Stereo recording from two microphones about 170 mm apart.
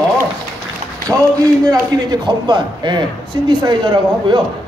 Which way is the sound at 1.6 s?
20° right (ahead or behind).